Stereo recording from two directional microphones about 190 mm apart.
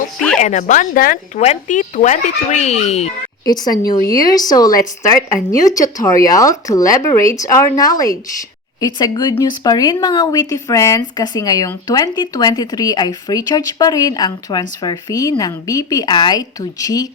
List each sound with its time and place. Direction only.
0.3 s speech: 40° left (ahead or behind)
3.4 s speech: 20° left (ahead or behind)